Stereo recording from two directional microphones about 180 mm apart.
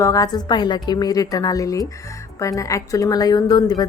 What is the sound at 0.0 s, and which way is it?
A woman's voice, 20° left (ahead or behind).